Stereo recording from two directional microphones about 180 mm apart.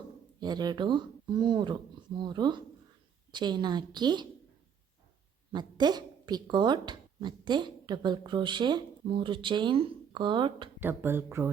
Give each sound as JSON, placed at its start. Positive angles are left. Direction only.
{"t": 0.3, "sound": "speech", "side_deg": -25}
{"t": 5.5, "sound": "speech", "side_deg": -25}
{"t": 10.8, "sound": "speech", "side_deg": -10}